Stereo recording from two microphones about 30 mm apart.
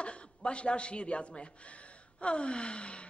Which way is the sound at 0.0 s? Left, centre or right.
Left.